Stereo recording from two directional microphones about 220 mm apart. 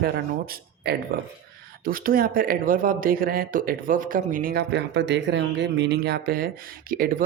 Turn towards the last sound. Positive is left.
turn(degrees=-40)  # may be behind; listen again after turning